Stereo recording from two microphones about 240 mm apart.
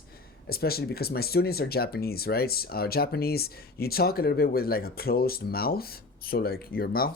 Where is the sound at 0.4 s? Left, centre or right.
Left.